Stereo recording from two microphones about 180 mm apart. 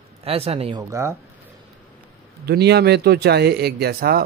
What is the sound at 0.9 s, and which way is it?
Speech, 15° right (ahead or behind).